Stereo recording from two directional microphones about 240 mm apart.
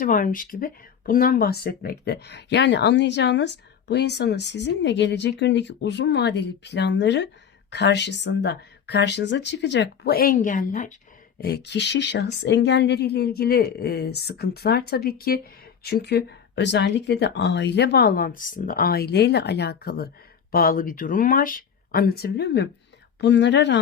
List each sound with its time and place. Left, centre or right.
0.0 s speech: left